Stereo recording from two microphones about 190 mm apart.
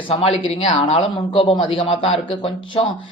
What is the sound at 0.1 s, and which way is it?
Speech, 30° left (ahead or behind).